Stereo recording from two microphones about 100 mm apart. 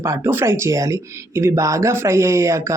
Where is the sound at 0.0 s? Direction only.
25° right (ahead or behind).